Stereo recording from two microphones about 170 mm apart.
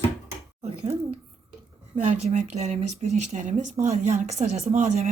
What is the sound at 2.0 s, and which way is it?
Speech, 40° right (ahead or behind).